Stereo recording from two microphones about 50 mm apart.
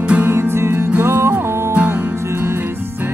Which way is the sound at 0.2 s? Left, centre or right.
Right.